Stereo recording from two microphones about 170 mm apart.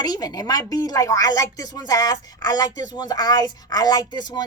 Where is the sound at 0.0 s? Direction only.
25° left (ahead or behind).